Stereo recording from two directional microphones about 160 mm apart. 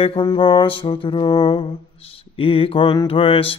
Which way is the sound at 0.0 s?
30° left (ahead or behind).